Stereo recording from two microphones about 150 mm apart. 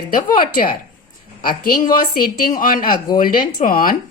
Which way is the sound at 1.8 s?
70° left (ahead or behind).